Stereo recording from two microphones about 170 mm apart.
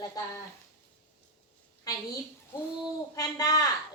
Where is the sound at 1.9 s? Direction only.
20° left (ahead or behind).